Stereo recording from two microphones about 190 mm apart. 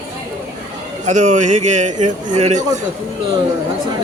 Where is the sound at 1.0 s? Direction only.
40° right (ahead or behind).